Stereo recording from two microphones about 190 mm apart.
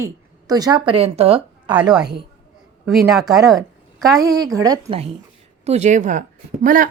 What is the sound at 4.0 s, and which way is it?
A woman's voice, 20° right (ahead or behind).